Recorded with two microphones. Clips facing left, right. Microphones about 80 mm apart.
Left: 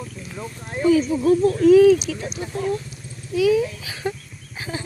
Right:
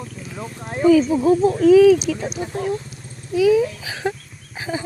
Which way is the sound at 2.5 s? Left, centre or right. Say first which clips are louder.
Left 1 dB; right.